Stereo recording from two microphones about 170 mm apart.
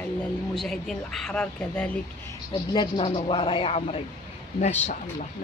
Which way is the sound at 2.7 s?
25° left (ahead or behind).